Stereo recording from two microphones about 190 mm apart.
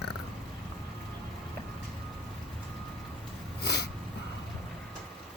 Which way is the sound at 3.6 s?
60° left (ahead or behind).